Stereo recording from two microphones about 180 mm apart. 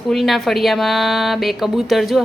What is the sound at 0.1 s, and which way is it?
Speech, centre (ahead or behind).